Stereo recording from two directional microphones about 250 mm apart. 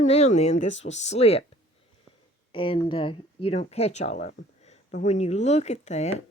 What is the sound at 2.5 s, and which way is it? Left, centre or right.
Speech, left.